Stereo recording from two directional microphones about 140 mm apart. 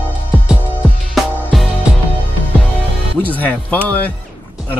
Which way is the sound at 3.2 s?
10° left (ahead or behind).